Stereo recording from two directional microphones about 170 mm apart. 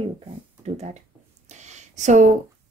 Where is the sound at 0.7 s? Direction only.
40° right (ahead or behind).